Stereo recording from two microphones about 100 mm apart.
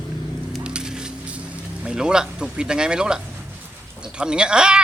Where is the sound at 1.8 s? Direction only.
5° right (ahead or behind).